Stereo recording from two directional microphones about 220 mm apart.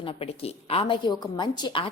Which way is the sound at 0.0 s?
25° left (ahead or behind).